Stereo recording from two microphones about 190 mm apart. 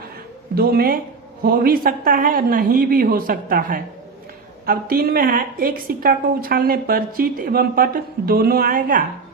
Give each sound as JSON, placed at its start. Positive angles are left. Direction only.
{"t": 0.5, "sound": "a woman's voice", "side_deg": -50}